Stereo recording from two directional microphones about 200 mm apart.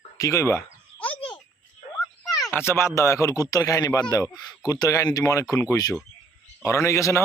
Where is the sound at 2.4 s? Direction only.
5° left (ahead or behind).